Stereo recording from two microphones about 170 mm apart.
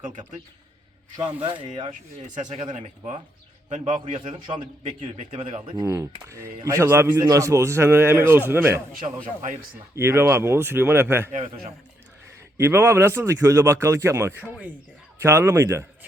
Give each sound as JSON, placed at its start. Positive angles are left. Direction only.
{"t": 0.0, "sound": "speech", "side_deg": -45}
{"t": 1.4, "sound": "a man's voice", "side_deg": -30}
{"t": 1.9, "sound": "speech", "side_deg": -45}
{"t": 4.4, "sound": "a man's voice", "side_deg": -25}
{"t": 5.1, "sound": "speech", "side_deg": -40}
{"t": 5.8, "sound": "a man's voice", "side_deg": -15}
{"t": 9.0, "sound": "speech", "side_deg": -35}
{"t": 9.9, "sound": "a man's voice", "side_deg": -15}
{"t": 11.3, "sound": "speech", "side_deg": -50}
{"t": 12.5, "sound": "a man's voice", "side_deg": -15}